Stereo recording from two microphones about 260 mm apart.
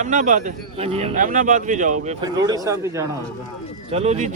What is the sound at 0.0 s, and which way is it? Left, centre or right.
Speech, right.